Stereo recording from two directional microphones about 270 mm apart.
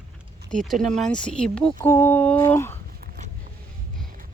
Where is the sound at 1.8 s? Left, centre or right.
Centre.